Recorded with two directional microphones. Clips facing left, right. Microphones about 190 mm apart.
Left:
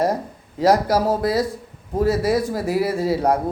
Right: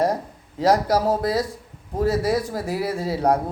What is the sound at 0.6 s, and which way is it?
Speech, 5° left (ahead or behind).